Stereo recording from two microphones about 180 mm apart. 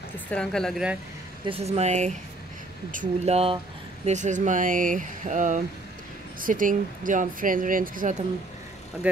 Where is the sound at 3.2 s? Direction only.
35° right (ahead or behind).